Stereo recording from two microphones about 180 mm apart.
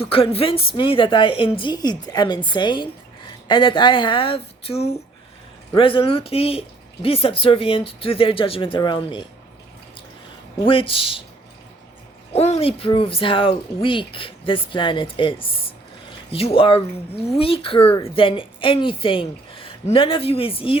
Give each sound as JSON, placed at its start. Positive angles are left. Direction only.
{"t": 0.1, "sound": "speech", "side_deg": 30}
{"t": 10.6, "sound": "speech", "side_deg": 30}
{"t": 12.3, "sound": "speech", "side_deg": 35}